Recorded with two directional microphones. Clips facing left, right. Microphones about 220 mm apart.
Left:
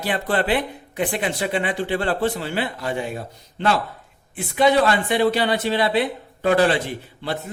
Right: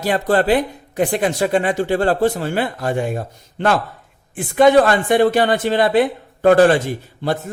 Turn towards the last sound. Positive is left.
turn(degrees=-45)  # may be behind; listen again after turning